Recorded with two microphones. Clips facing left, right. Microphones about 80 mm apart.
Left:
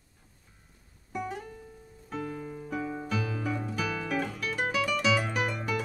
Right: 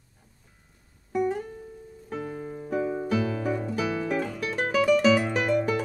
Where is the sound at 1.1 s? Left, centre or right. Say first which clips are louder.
Right 9 dB; right.